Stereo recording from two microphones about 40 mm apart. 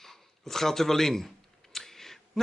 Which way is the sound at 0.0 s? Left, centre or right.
Centre.